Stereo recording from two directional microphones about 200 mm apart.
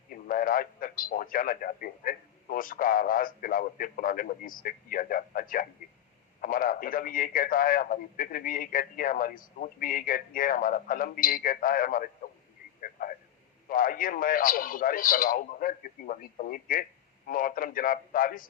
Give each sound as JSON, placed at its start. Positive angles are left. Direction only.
{"t": 0.1, "sound": "a man's voice", "side_deg": 45}
{"t": 12.8, "sound": "radio", "side_deg": 45}
{"t": 13.7, "sound": "a man's voice", "side_deg": 45}